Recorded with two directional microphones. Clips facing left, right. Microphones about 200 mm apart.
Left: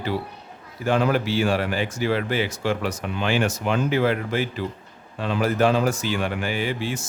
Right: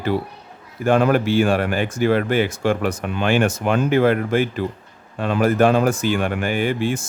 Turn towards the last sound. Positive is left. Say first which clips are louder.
# right 6 dB
turn(degrees=-50)  # may be behind; listen again after turning